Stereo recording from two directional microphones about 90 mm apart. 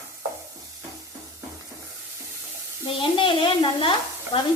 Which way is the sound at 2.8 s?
80° left.